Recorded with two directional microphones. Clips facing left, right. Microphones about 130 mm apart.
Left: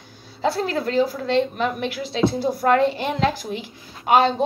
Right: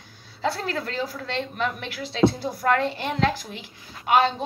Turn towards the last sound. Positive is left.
turn(degrees=25)  # may be behind; listen again after turning